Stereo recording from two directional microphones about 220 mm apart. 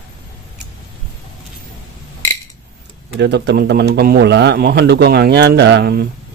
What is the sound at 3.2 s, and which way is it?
Speech, 50° right (ahead or behind).